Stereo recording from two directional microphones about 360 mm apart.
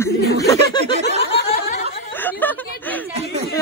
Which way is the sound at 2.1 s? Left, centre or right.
Centre.